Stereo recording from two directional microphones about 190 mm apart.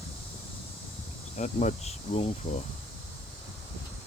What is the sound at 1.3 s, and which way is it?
Speech, 40° left (ahead or behind).